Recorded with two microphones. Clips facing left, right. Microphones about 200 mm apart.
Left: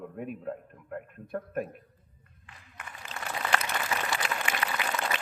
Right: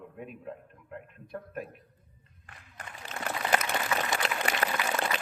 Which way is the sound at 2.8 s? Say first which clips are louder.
Right 1 dB; 35° right (ahead or behind).